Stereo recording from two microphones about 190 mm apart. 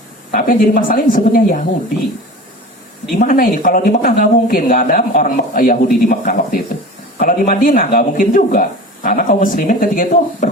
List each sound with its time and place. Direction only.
0.3 s speech: 50° left (ahead or behind)
3.2 s speech: 45° left (ahead or behind)